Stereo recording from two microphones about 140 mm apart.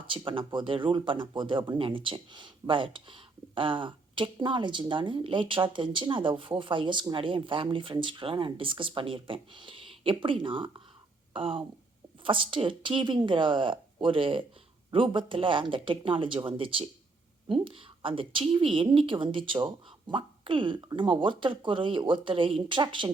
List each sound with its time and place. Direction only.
0.1 s speech: 35° right (ahead or behind)